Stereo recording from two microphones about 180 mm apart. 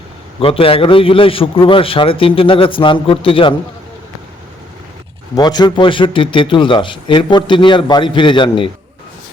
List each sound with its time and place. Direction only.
0.3 s a man's voice: 30° left (ahead or behind)
5.3 s a man's voice: 20° left (ahead or behind)